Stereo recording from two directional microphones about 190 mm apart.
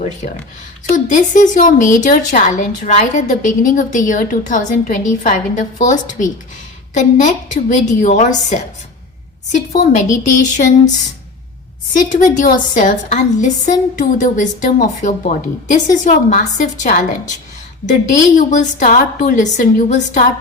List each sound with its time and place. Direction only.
0.2 s a woman's voice: 35° left (ahead or behind)
9.7 s a woman's voice: 40° left (ahead or behind)
11.9 s a woman's voice: 45° left (ahead or behind)
18.1 s a woman's voice: 40° left (ahead or behind)